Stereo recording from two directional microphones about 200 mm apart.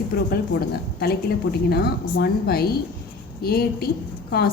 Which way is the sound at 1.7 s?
55° left (ahead or behind).